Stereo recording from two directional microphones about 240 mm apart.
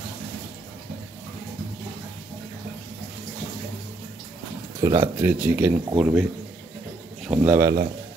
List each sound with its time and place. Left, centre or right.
4.7 s speech: centre
7.2 s speech: centre